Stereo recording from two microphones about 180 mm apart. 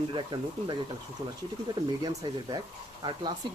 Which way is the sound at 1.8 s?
20° right (ahead or behind).